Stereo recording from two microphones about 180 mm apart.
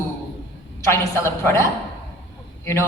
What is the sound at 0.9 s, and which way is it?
A woman's voice, 15° left (ahead or behind).